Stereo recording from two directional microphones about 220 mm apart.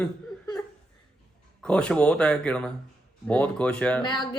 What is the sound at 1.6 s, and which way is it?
Speech, 5° left (ahead or behind).